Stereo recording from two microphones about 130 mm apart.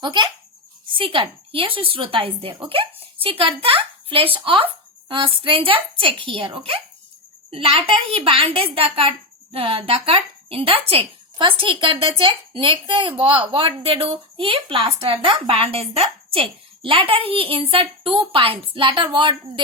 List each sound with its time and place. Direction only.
0.0 s a woman's voice: 35° right (ahead or behind)